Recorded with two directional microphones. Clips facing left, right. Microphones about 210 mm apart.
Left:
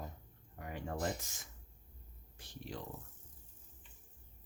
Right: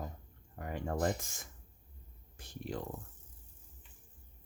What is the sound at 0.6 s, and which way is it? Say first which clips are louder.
Speech: right 5 dB; 50° right (ahead or behind).